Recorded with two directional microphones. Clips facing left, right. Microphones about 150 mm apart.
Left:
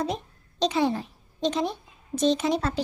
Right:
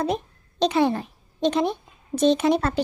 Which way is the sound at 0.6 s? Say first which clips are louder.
Right 3 dB; 60° right (ahead or behind).